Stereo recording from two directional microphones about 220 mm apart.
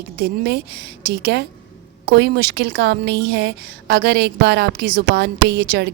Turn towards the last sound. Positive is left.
turn(degrees=-50)  # may be behind; listen again after turning